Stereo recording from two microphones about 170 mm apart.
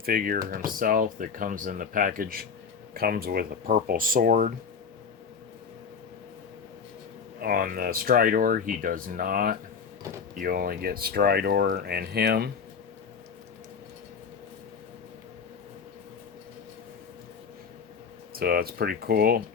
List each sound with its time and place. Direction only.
0.0 s speech: 60° right (ahead or behind)
7.4 s speech: 55° right (ahead or behind)
18.3 s speech: 65° right (ahead or behind)